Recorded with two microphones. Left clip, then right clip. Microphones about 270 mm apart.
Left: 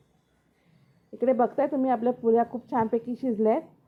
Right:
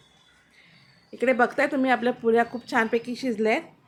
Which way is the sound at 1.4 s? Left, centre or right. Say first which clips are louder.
Right 2 dB; centre.